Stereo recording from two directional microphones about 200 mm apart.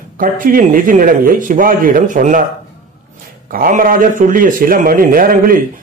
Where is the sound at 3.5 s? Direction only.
45° right (ahead or behind).